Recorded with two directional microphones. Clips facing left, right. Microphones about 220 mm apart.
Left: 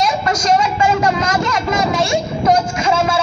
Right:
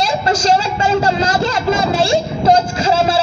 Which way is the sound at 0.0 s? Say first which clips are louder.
Right 2 dB; 30° right (ahead or behind).